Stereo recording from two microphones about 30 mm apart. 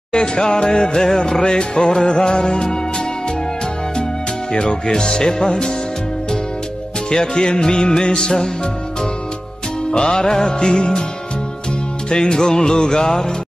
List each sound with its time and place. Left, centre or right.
0.1 s music: left
4.5 s music: left
7.1 s music: left
9.8 s music: left
12.1 s music: left